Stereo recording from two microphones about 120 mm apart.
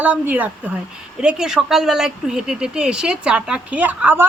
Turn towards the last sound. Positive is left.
turn(degrees=-15)  # may be behind; listen again after turning